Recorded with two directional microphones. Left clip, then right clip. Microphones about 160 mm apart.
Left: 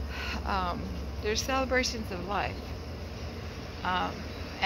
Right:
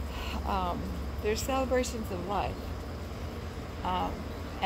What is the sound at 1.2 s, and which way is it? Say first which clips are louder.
Speech: left 1 dB; 15° right (ahead or behind).